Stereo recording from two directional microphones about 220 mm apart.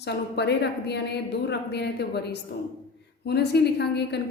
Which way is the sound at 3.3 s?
50° left (ahead or behind).